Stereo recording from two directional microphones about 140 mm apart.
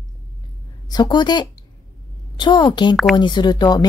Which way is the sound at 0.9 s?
30° left (ahead or behind).